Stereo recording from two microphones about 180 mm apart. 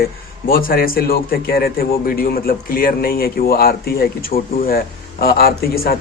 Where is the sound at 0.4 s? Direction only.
55° left (ahead or behind).